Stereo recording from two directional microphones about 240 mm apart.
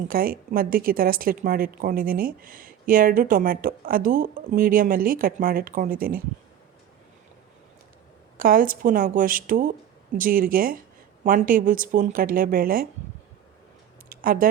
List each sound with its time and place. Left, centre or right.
0.1 s speech: right
8.4 s speech: right
14.1 s speech: right